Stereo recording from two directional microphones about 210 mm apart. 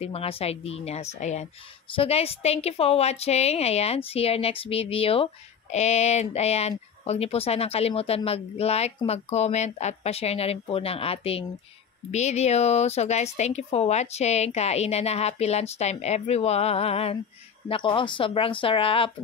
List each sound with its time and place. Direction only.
0.0 s a woman's voice: 30° left (ahead or behind)